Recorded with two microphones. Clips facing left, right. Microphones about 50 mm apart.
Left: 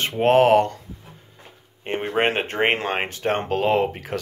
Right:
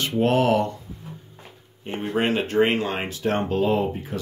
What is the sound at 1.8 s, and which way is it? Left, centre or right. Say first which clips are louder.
Speech: left 3 dB; left.